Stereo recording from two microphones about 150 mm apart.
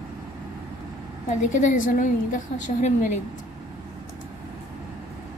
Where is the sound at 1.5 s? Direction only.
60° left (ahead or behind).